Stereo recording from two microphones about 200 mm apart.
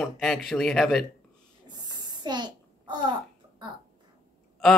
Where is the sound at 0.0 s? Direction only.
Centre (ahead or behind).